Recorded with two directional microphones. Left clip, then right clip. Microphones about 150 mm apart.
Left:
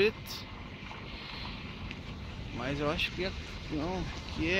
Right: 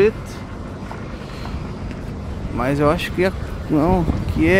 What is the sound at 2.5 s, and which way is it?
Speech, 25° right (ahead or behind).